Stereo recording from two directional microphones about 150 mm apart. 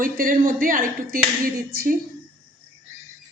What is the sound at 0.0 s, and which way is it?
Speech, 70° right (ahead or behind).